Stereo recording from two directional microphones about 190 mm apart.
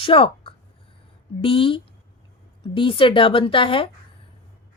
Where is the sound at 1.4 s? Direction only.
30° left (ahead or behind).